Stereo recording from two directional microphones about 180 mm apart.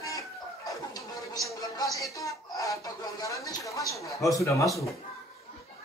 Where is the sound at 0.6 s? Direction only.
20° left (ahead or behind).